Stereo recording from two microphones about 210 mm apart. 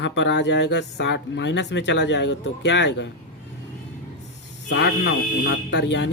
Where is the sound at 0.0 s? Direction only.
55° left (ahead or behind).